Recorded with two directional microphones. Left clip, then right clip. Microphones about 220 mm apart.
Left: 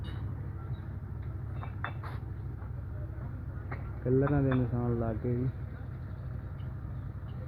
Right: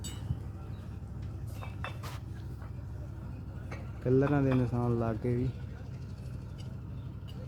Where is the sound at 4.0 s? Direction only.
15° right (ahead or behind).